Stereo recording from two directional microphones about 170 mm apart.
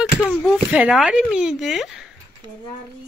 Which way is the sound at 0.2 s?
10° left (ahead or behind).